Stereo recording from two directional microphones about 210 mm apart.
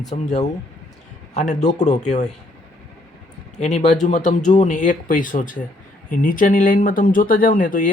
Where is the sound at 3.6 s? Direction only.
35° left (ahead or behind).